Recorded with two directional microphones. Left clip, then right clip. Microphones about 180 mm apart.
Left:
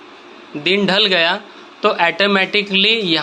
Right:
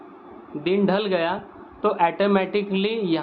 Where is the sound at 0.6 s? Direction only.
25° left (ahead or behind).